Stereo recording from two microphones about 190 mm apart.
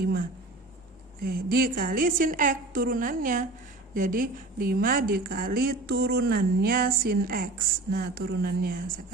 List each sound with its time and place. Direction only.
1.2 s a woman's voice: 50° right (ahead or behind)